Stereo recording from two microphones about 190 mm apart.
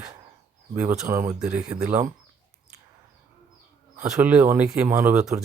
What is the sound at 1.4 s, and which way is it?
Speech, 5° right (ahead or behind).